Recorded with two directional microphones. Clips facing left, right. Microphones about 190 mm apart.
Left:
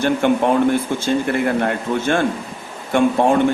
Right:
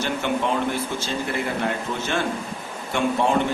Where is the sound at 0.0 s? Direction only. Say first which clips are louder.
Left 8 dB; 55° left (ahead or behind).